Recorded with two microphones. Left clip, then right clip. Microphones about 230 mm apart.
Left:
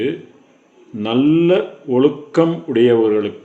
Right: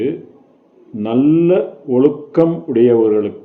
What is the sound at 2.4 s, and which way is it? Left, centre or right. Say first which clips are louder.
Speech: right 1 dB; centre.